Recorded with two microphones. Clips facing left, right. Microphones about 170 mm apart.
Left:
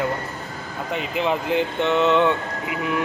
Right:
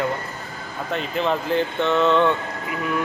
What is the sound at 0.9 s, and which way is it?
Speech, 15° left (ahead or behind).